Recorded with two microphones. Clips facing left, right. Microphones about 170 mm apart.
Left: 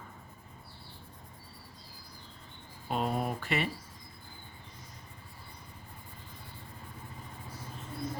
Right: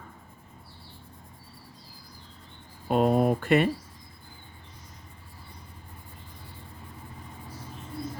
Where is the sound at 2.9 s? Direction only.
50° right (ahead or behind).